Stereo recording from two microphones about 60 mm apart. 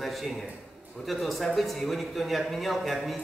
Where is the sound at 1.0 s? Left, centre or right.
Centre.